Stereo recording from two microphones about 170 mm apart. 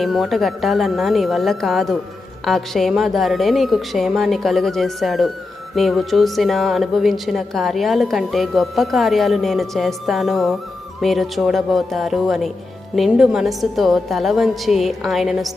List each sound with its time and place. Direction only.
0.0 s a woman's voice: centre (ahead or behind)